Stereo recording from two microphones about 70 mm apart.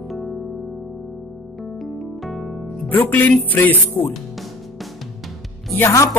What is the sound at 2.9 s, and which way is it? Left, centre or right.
Speech, left.